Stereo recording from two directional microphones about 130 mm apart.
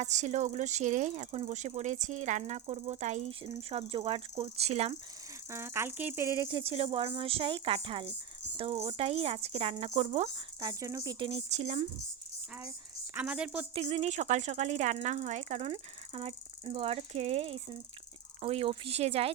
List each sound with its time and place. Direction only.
0.0 s speech: 65° right (ahead or behind)
2.5 s speech: 55° right (ahead or behind)
3.6 s speech: 50° right (ahead or behind)
5.5 s speech: 20° right (ahead or behind)
6.5 s speech: 45° right (ahead or behind)
10.6 s speech: 30° right (ahead or behind)
11.3 s speech: 55° right (ahead or behind)
13.1 s a woman's voice: 10° right (ahead or behind)
13.7 s speech: 55° right (ahead or behind)
15.7 s speech: 45° right (ahead or behind)